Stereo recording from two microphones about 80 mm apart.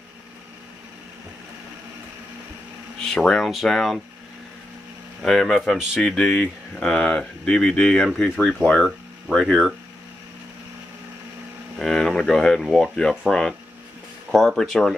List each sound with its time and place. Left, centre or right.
3.1 s speech: centre
5.2 s speech: centre
11.8 s speech: centre